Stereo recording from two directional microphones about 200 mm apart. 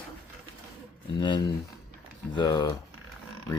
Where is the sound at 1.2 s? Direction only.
20° left (ahead or behind).